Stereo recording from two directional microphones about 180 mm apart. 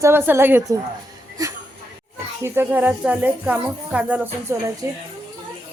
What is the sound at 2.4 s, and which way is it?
Speech, 10° right (ahead or behind).